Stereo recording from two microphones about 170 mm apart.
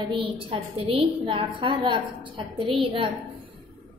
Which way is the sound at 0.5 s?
30° right (ahead or behind).